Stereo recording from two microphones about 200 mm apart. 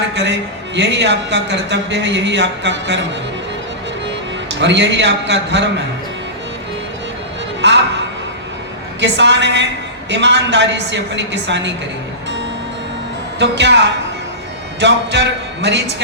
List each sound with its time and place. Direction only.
0.1 s a sound: 60° right (ahead or behind)
0.8 s speech: 60° right (ahead or behind)
4.6 s speech: 60° right (ahead or behind)
7.6 s a sound: 60° right (ahead or behind)
9.0 s speech: 60° right (ahead or behind)
13.4 s speech: 60° right (ahead or behind)